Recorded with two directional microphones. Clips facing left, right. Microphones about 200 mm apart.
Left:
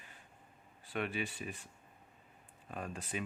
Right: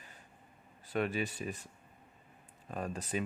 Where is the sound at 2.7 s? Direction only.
40° right (ahead or behind).